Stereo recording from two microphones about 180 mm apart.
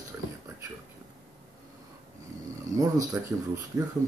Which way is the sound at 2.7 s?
20° right (ahead or behind).